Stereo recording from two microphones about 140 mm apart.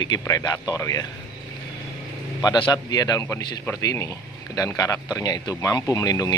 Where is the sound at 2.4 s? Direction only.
30° left (ahead or behind).